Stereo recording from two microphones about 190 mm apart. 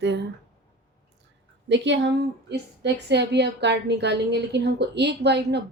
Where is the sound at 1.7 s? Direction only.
65° right (ahead or behind).